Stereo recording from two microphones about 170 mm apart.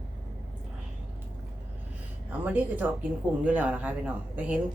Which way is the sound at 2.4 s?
10° right (ahead or behind).